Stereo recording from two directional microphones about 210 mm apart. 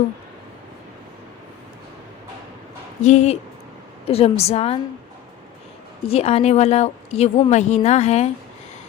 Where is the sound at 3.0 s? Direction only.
35° left (ahead or behind).